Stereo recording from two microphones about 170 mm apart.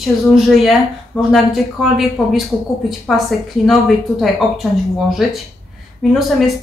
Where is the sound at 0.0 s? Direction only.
Centre (ahead or behind).